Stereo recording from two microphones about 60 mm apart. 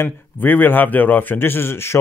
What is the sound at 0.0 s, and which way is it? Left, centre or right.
A man's voice, left.